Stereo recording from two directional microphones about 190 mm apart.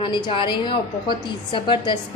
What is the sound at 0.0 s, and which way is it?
A woman's voice, 25° left (ahead or behind).